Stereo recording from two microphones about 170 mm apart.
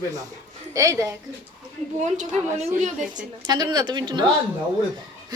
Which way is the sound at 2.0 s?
45° right (ahead or behind).